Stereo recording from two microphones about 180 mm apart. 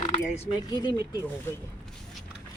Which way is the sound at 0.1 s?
35° left (ahead or behind).